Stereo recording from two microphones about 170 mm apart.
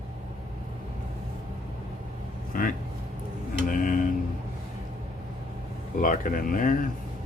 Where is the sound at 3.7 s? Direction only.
50° left (ahead or behind).